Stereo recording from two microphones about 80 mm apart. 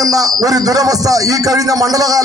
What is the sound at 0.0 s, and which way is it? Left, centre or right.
Speech, right.